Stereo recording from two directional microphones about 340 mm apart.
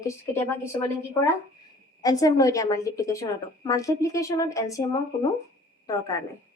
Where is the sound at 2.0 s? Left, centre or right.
Centre.